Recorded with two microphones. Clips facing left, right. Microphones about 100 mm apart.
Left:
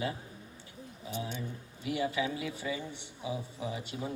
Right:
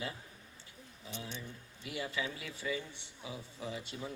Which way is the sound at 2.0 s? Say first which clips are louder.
Left 7 dB; 25° left (ahead or behind).